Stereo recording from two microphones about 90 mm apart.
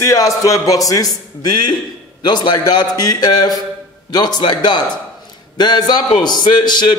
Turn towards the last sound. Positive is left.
turn(degrees=55)  # may be behind; listen again after turning